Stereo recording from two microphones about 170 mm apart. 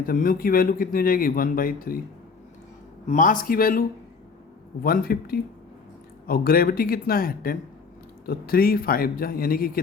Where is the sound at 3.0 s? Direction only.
50° left (ahead or behind).